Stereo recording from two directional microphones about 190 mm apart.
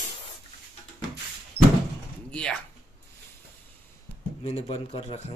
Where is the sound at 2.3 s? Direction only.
5° left (ahead or behind).